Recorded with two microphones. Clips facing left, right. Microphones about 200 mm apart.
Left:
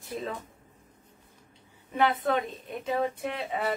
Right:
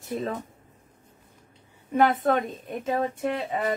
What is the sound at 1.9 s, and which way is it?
Speech, 45° right (ahead or behind).